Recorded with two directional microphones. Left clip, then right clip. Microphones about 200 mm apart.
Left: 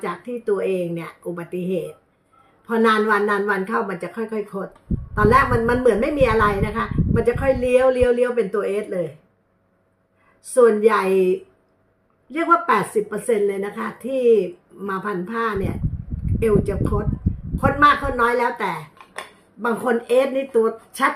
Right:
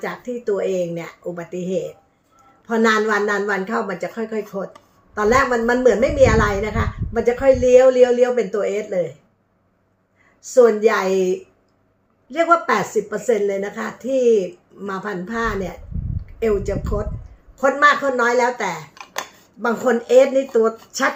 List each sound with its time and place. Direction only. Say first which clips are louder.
0.0 s a woman's voice: right 1 dB; 15° left (ahead or behind)
2.6 s a woman's voice: even; 15° left (ahead or behind)
10.4 s a woman's voice: right 1 dB; 15° left (ahead or behind)